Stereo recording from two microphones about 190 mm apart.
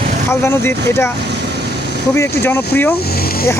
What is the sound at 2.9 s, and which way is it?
Speech, 55° left (ahead or behind).